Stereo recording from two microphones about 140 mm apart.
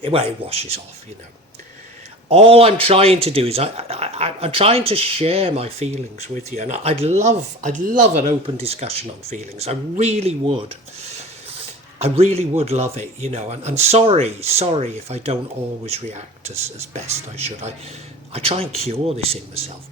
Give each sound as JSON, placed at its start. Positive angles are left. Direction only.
{"t": 0.0, "sound": "speech", "side_deg": -45}
{"t": 2.3, "sound": "speech", "side_deg": -45}
{"t": 8.6, "sound": "speech", "side_deg": -45}
{"t": 11.9, "sound": "speech", "side_deg": -45}